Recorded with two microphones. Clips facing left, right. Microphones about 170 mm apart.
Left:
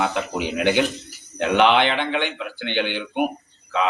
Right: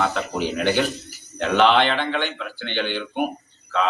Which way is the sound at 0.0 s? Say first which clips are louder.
Even; 15° left (ahead or behind).